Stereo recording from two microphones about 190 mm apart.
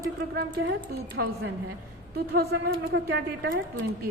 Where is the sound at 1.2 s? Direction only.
70° right (ahead or behind).